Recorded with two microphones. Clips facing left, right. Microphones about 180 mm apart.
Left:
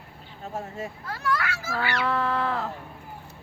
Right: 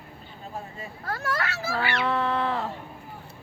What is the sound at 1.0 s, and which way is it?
Speech, 45° right (ahead or behind).